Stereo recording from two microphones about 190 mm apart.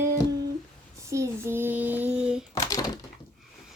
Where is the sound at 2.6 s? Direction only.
20° left (ahead or behind).